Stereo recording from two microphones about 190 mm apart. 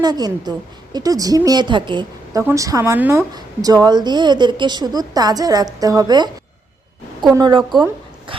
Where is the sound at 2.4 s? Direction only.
15° right (ahead or behind).